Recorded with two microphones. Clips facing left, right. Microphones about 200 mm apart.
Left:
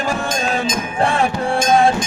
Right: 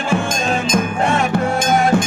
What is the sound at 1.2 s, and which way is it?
Music, 30° left (ahead or behind).